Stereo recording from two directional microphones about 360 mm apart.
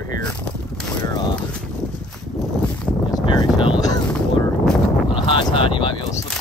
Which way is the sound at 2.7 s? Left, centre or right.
Centre.